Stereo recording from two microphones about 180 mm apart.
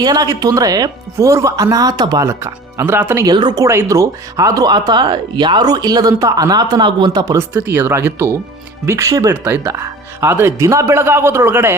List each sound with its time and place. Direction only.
0.0 s speech: 20° right (ahead or behind)